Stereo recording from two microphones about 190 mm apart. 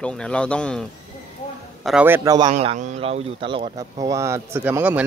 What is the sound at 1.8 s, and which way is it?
Speech, 5° right (ahead or behind).